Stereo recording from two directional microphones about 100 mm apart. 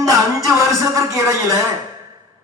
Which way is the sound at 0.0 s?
30° right (ahead or behind).